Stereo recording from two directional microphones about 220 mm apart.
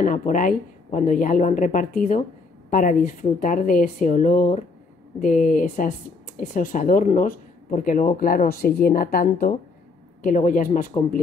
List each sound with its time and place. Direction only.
0.0 s speech: 35° left (ahead or behind)